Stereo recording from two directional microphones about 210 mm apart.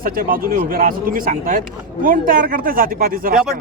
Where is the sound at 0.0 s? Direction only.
40° right (ahead or behind).